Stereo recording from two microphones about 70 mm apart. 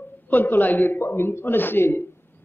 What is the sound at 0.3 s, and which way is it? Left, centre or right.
A man's voice, left.